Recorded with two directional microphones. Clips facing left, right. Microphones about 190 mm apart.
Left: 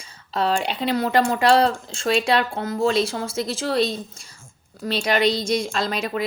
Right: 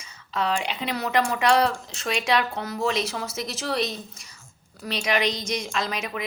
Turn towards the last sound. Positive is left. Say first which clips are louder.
# left 4 dB
turn(degrees=30)  # may be behind; listen again after turning